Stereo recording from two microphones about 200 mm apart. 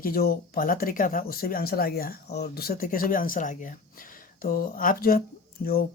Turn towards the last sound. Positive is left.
turn(degrees=50)  # may be behind; listen again after turning